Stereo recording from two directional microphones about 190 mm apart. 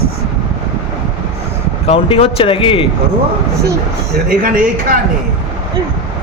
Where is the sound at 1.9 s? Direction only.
30° left (ahead or behind).